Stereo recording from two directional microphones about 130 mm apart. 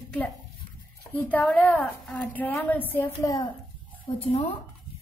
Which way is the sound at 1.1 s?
10° left (ahead or behind).